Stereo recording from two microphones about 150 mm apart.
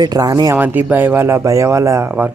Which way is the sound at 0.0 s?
25° right (ahead or behind).